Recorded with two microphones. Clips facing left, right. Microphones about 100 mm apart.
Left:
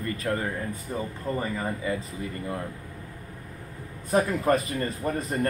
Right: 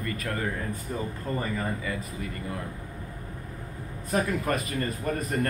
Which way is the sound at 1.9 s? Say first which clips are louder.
Left 4 dB; 25° left (ahead or behind).